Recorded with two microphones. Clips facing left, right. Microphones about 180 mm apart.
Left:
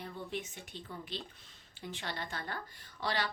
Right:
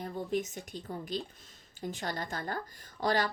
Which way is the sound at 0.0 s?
40° right (ahead or behind).